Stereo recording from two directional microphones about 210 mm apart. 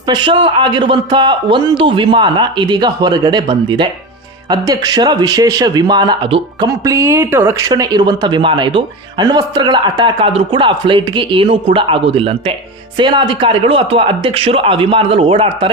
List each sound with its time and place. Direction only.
0.1 s speech: 25° right (ahead or behind)